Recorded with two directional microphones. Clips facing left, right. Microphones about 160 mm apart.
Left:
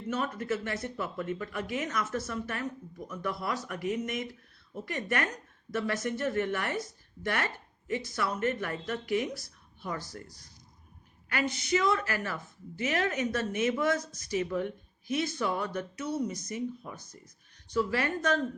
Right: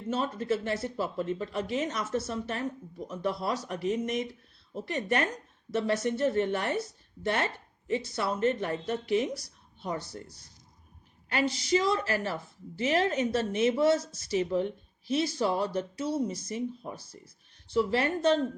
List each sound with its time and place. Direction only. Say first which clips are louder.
0.1 s a woman's voice: right 2 dB; 30° right (ahead or behind)
11.3 s a woman's voice: right 3 dB; 30° right (ahead or behind)